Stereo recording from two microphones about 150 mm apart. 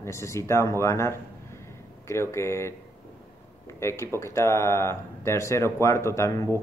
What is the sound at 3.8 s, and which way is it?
Speech, 15° left (ahead or behind).